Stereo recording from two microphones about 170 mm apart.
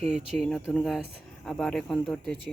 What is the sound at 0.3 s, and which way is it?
Speech, centre (ahead or behind).